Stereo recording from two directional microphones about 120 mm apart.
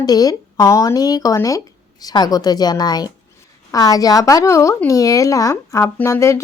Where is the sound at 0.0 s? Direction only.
30° left (ahead or behind).